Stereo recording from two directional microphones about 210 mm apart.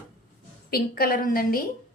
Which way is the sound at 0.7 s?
45° left (ahead or behind).